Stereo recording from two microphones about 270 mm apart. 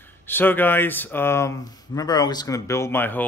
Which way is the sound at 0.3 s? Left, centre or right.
Centre.